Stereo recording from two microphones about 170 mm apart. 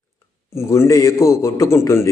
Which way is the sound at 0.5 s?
15° left (ahead or behind).